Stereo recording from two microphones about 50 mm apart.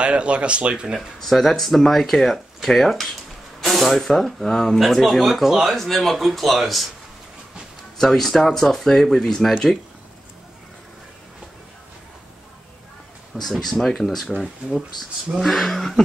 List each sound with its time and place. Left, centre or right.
0.0 s speech: right
0.9 s speech: centre
8.0 s speech: centre
13.4 s speech: centre
15.4 s speech: centre